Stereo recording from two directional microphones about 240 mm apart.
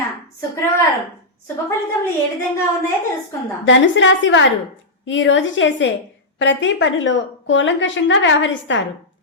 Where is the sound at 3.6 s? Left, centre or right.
Left.